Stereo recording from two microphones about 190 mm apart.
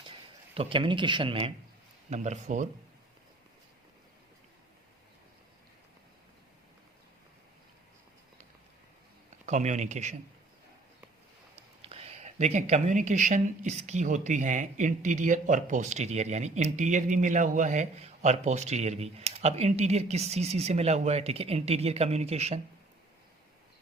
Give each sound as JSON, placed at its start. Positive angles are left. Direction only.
{"t": 0.0, "sound": "speech", "side_deg": -30}
{"t": 9.5, "sound": "speech", "side_deg": -40}
{"t": 11.5, "sound": "speech", "side_deg": -30}